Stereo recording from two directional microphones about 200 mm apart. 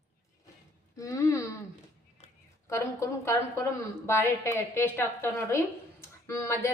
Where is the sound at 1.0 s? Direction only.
15° left (ahead or behind).